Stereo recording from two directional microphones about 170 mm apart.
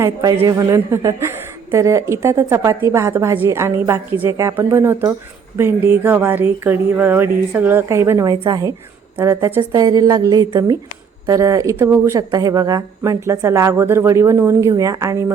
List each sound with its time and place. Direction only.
0.0 s a woman's voice: 20° right (ahead or behind)